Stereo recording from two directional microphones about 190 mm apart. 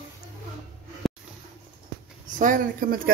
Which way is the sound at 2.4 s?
45° right (ahead or behind).